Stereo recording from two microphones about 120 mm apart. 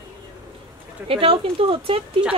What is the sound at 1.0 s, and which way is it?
Speech, 50° right (ahead or behind).